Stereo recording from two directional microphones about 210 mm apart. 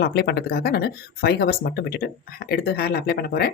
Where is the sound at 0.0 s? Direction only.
50° left (ahead or behind).